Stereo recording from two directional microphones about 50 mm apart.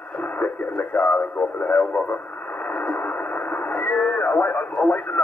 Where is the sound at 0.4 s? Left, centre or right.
Left.